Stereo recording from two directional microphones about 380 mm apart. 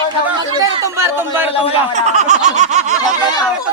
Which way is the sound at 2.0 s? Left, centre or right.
Centre.